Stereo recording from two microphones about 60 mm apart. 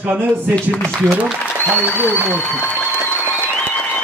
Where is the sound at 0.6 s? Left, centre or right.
Centre.